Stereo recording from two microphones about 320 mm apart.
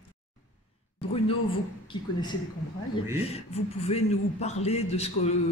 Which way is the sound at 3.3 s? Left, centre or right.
Centre.